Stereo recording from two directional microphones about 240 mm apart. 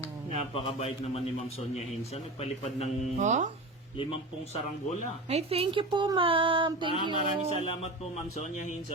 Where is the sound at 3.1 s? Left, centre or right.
Right.